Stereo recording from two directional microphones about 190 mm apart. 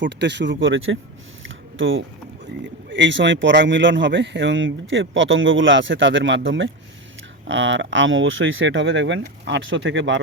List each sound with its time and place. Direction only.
0.0 s speech: 65° right (ahead or behind); by 0.9 s 90° right
1.5 s a sound: 90° right
2.9 s speech: 70° right (ahead or behind)